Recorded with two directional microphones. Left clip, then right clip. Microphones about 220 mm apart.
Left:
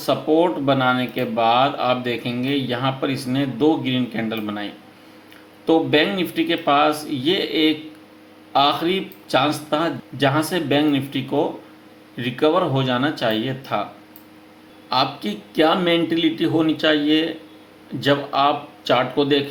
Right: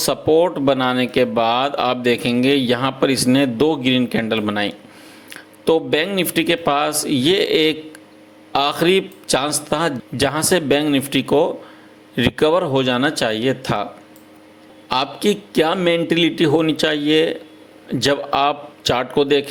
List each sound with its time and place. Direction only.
0.0 s speech: 45° right (ahead or behind)
14.8 s a man's voice: 45° right (ahead or behind)